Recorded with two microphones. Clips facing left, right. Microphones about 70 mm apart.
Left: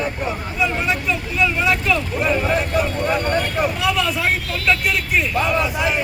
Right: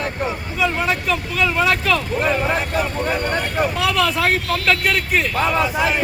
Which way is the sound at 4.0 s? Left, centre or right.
Right.